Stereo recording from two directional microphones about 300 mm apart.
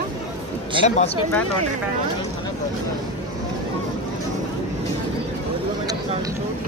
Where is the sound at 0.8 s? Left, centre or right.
Left.